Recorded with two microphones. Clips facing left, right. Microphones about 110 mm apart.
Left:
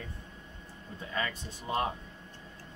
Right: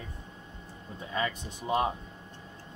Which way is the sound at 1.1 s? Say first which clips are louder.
Right 3 dB; 20° right (ahead or behind).